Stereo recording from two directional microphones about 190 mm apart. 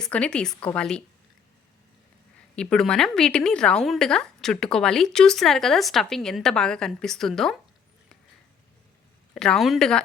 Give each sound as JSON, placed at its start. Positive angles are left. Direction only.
{"t": 0.0, "sound": "a woman's voice", "side_deg": 5}
{"t": 2.6, "sound": "a woman's voice", "side_deg": 5}
{"t": 9.3, "sound": "a woman's voice", "side_deg": 5}